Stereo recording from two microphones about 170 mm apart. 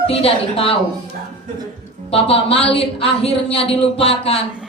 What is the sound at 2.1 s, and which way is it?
Speech, 35° left (ahead or behind).